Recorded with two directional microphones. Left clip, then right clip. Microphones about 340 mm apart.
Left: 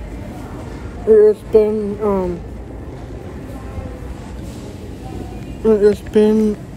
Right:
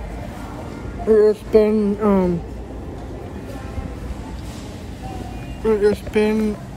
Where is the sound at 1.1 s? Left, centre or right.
Centre.